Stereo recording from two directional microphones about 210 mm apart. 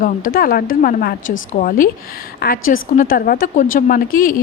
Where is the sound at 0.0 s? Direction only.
45° left (ahead or behind).